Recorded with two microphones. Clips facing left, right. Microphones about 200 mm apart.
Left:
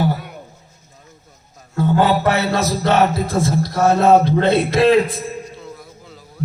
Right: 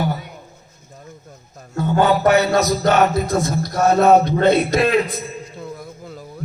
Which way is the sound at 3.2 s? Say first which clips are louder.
Left 1 dB; 30° left (ahead or behind).